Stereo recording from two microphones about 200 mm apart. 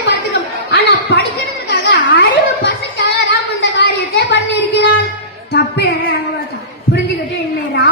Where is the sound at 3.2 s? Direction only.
60° left (ahead or behind).